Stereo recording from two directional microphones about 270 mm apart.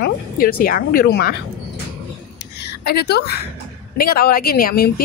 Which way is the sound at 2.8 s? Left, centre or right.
Left.